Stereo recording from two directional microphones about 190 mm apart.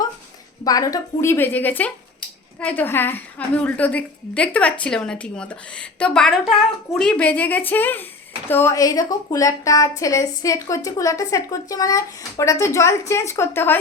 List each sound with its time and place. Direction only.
0.6 s speech: 20° left (ahead or behind)